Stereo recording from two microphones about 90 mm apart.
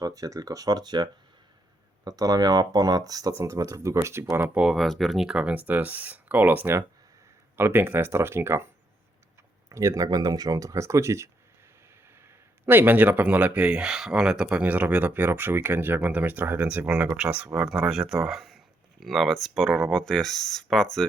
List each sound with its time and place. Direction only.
0.0 s speech: 40° right (ahead or behind)
4.5 s speech: 5° right (ahead or behind); by 8.6 s 30° right (ahead or behind)
9.6 s speech: 35° right (ahead or behind)
12.6 s speech: 20° right (ahead or behind); by 20.8 s 5° left (ahead or behind)